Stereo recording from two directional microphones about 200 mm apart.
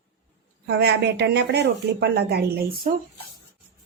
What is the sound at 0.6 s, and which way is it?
Speech, 55° right (ahead or behind).